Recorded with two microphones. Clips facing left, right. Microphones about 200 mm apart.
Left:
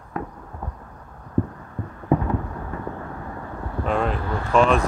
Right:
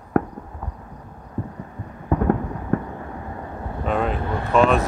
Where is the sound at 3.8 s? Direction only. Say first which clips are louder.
Right 1 dB; centre (ahead or behind).